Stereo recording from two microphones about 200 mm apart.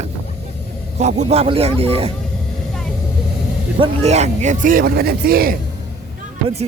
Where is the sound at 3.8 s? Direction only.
30° right (ahead or behind); by 5.5 s 50° right (ahead or behind).